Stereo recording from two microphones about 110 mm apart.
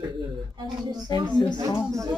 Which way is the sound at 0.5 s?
40° right (ahead or behind).